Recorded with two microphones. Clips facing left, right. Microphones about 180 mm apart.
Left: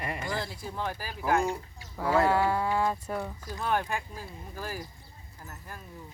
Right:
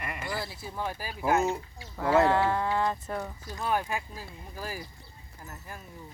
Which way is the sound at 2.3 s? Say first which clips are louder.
Even; 10° left (ahead or behind).